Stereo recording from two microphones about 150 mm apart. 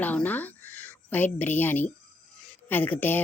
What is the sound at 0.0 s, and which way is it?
A woman's voice, 10° left (ahead or behind).